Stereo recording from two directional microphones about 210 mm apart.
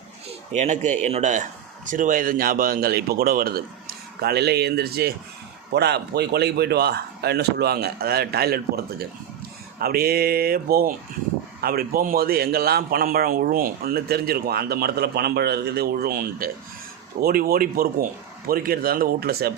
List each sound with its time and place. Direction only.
0.3 s a man's voice: 35° right (ahead or behind)